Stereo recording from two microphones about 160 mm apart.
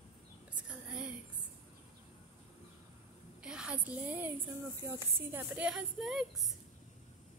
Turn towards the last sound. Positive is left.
turn(degrees=0)  # may be behind; listen again after turning